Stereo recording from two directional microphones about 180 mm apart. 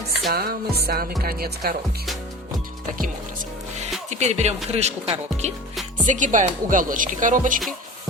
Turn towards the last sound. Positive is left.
turn(degrees=-45)  # may be behind; listen again after turning